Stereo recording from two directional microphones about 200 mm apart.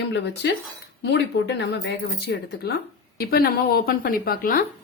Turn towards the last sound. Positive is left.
turn(degrees=45)  # may be behind; listen again after turning